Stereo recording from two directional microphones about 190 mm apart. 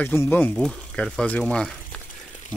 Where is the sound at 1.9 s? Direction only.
5° left (ahead or behind).